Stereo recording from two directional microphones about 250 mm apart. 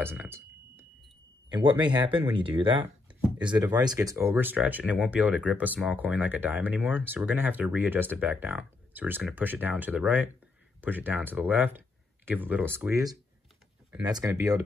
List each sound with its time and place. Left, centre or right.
0.0 s speech: centre